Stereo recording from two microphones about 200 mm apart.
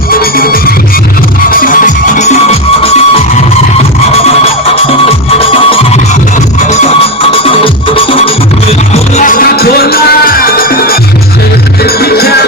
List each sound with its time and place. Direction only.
0.1 s music: 45° left (ahead or behind); by 3.2 s 30° left (ahead or behind)
4.7 s music: 30° left (ahead or behind)
8.9 s music: 40° left (ahead or behind)